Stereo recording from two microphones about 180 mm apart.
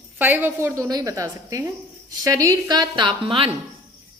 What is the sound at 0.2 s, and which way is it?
A woman's voice, 10° right (ahead or behind).